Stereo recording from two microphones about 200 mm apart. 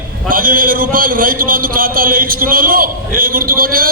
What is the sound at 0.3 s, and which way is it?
A man's voice, 45° right (ahead or behind).